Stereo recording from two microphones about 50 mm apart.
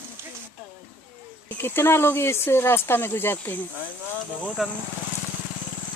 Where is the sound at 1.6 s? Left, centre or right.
Left.